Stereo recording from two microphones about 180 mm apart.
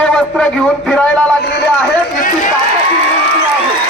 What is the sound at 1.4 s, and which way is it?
Speech, 65° left (ahead or behind).